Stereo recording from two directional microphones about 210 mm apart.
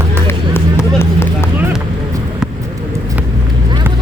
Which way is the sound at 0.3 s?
10° left (ahead or behind).